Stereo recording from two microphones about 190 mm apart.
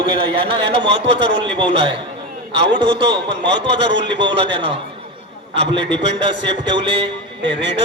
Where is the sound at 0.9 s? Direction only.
65° right (ahead or behind).